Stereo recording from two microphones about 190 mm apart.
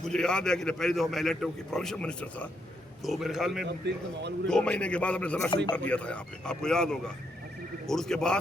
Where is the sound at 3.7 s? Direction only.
65° right (ahead or behind).